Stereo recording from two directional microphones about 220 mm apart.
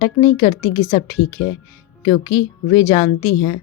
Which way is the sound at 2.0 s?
20° left (ahead or behind).